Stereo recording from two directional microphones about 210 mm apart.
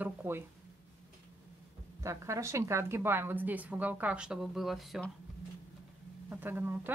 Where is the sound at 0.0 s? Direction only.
10° right (ahead or behind).